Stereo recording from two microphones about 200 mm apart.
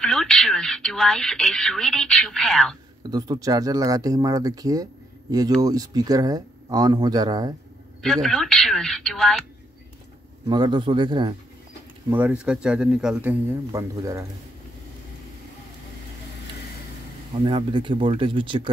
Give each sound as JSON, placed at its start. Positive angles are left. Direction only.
{"t": 0.0, "sound": "speech", "side_deg": 5}
{"t": 3.1, "sound": "speech", "side_deg": -20}
{"t": 8.0, "sound": "speech", "side_deg": 5}
{"t": 10.5, "sound": "speech", "side_deg": -25}
{"t": 12.1, "sound": "speech", "side_deg": -10}
{"t": 17.5, "sound": "speech", "side_deg": -25}